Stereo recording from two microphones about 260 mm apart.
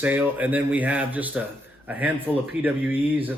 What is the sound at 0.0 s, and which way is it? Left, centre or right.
Speech, centre.